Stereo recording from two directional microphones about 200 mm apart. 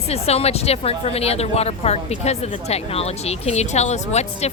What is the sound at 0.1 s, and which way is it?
Speech, 30° left (ahead or behind).